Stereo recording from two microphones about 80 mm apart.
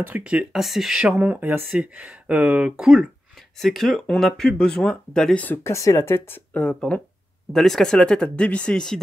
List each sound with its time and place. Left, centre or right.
0.0 s speech: centre
1.2 s speech: right
3.5 s speech: centre
5.6 s speech: left; by 9.0 s centre